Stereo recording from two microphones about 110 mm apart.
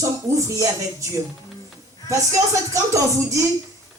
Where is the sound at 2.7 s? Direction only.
30° right (ahead or behind).